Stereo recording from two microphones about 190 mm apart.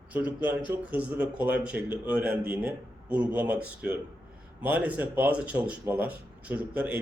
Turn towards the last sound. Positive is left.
turn(degrees=-5)  # may be behind; listen again after turning